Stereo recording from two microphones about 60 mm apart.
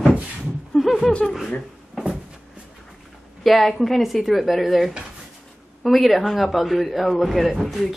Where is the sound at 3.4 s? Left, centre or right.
Centre.